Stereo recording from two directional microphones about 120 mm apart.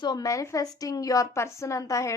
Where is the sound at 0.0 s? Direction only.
35° left (ahead or behind).